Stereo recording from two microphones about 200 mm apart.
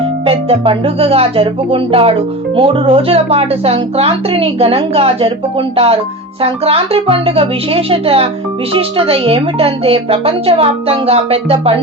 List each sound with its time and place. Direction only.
0.3 s speech: 30° right (ahead or behind)